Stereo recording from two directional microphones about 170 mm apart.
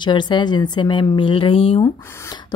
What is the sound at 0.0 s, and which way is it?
A woman's voice, 25° left (ahead or behind).